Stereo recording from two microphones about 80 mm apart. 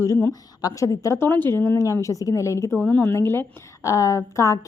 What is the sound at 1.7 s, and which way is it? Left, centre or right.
A woman's voice, left.